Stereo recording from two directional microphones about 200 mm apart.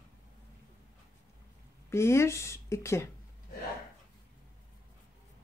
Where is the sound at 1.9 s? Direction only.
15° left (ahead or behind).